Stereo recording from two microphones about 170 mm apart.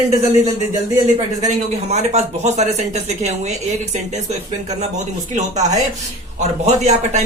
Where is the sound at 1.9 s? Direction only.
40° right (ahead or behind).